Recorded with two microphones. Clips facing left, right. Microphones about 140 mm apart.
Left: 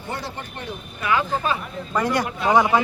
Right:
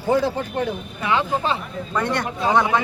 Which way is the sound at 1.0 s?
25° right (ahead or behind).